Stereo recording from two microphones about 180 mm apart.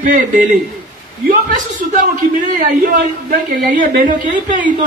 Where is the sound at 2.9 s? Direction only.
50° right (ahead or behind).